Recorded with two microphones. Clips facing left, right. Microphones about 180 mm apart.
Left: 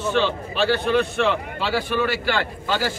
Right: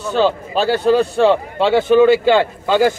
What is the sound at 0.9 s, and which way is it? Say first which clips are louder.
A man's voice: right 7 dB; 30° right (ahead or behind).